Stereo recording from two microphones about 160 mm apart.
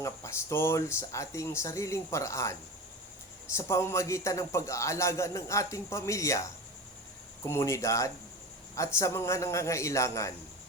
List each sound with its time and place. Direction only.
0.0 s a man's voice: 15° left (ahead or behind)